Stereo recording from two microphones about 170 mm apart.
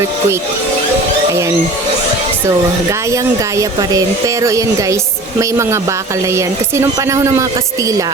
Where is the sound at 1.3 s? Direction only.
15° right (ahead or behind).